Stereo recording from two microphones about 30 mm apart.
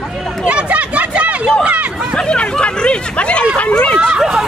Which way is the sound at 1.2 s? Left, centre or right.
Right.